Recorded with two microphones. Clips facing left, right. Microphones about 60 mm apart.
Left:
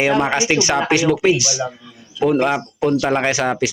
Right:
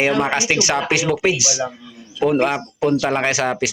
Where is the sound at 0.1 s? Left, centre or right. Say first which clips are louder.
Left 2 dB; centre.